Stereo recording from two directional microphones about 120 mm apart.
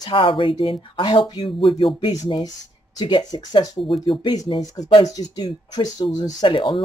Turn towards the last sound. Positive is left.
turn(degrees=45)  # may be behind; listen again after turning